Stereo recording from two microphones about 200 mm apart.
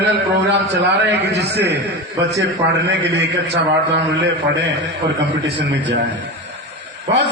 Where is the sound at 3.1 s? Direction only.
60° right (ahead or behind).